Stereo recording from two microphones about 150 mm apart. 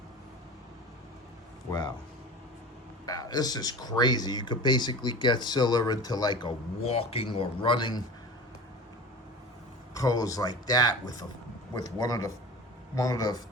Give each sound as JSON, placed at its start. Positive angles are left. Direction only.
{"t": 3.1, "sound": "speech", "side_deg": 25}
{"t": 6.8, "sound": "speech", "side_deg": 40}
{"t": 9.9, "sound": "speech", "side_deg": 25}